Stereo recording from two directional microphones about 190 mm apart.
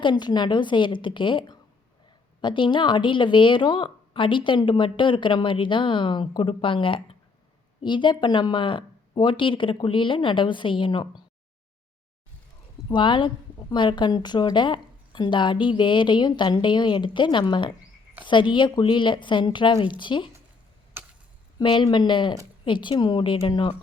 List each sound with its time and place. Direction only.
0.0 s a woman's voice: 25° left (ahead or behind)
12.9 s a woman's voice: 25° left (ahead or behind)
21.6 s a woman's voice: 25° left (ahead or behind)